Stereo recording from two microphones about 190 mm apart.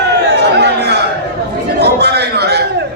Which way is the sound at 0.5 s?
60° right (ahead or behind).